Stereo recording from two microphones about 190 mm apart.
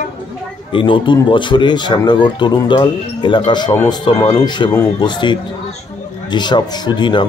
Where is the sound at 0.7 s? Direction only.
25° left (ahead or behind).